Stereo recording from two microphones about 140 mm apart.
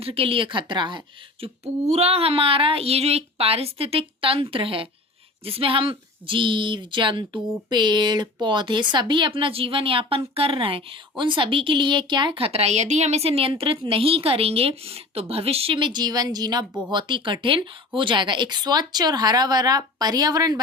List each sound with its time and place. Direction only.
0.0 s a woman's voice: 40° right (ahead or behind)
1.6 s a woman's voice: 50° right (ahead or behind); by 20.6 s 30° right (ahead or behind)